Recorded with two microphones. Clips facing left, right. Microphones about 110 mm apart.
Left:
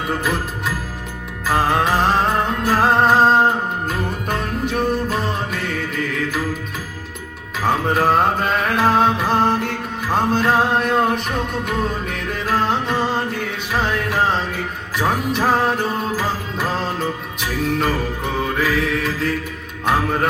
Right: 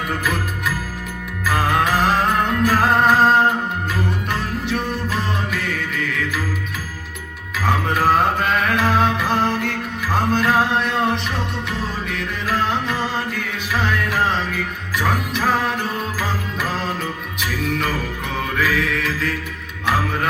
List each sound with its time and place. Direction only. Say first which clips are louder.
1.5 s music: left 1 dB; 35° left (ahead or behind)
7.7 s music: left 1 dB; 35° left (ahead or behind)
10.3 s male singing: even; 35° left (ahead or behind)
12.0 s music: left 1 dB; 40° left (ahead or behind)
18.6 s mantra: right 1 dB; 35° left (ahead or behind)